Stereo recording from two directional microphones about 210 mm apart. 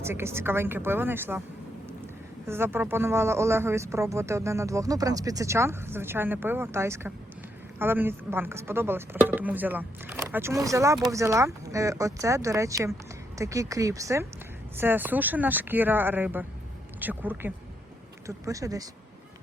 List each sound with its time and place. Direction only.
0.0 s speech: 10° right (ahead or behind)
2.5 s speech: 10° right (ahead or behind)